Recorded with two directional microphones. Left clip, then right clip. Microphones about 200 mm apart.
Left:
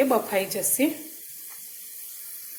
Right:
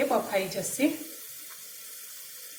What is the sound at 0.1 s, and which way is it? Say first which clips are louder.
Speech: left 3 dB; 45° left (ahead or behind).